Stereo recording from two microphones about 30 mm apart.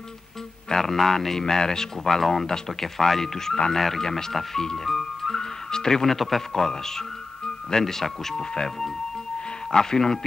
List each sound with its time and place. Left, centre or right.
0.7 s a man's voice: centre
4.9 s music: centre
6.0 s a man's voice: centre
9.7 s speech: left